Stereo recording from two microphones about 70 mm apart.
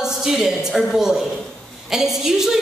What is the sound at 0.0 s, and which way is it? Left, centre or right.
A woman's voice, centre.